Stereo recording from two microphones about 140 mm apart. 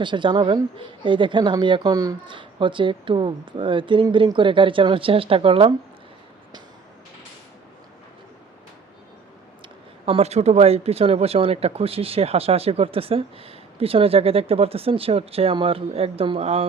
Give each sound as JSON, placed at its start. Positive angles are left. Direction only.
{"t": 0.0, "sound": "a woman's voice", "side_deg": -35}
{"t": 2.3, "sound": "a woman's voice", "side_deg": -35}
{"t": 10.1, "sound": "speech", "side_deg": -50}